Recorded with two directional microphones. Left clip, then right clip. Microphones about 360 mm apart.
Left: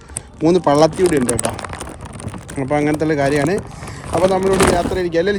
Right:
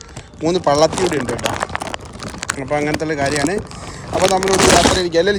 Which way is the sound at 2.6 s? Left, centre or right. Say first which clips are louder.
Left 3 dB; centre.